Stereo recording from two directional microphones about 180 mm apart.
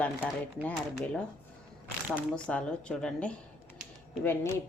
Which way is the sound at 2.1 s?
5° left (ahead or behind).